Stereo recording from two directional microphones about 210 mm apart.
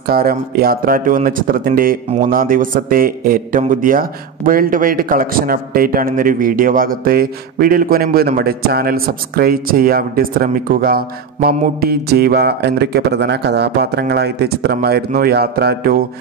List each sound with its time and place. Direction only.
0.0 s speech: 45° right (ahead or behind)